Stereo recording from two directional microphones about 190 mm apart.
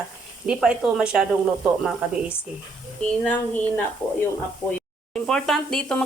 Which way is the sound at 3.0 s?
10° left (ahead or behind).